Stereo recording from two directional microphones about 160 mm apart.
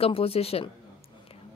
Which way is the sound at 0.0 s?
35° left (ahead or behind).